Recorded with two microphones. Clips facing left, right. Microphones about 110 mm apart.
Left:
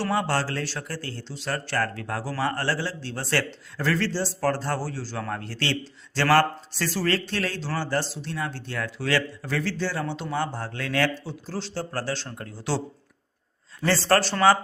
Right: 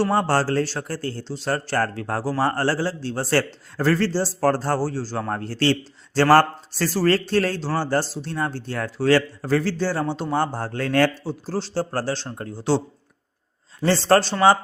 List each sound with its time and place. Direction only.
0.0 s a man's voice: 40° right (ahead or behind)
13.8 s a man's voice: 25° right (ahead or behind)